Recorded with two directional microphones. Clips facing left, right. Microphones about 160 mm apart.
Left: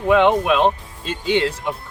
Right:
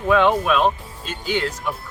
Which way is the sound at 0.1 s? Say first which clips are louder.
Left 2 dB; 20° left (ahead or behind).